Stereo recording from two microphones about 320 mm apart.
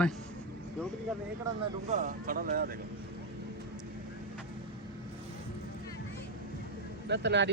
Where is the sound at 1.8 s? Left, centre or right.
Right.